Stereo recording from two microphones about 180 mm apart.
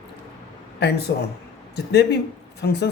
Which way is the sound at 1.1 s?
70° left (ahead or behind).